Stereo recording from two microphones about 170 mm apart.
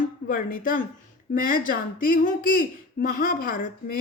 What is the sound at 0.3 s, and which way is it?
A woman's voice, 55° left (ahead or behind).